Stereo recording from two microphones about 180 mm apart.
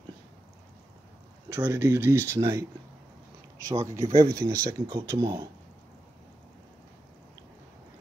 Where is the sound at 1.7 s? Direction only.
15° right (ahead or behind).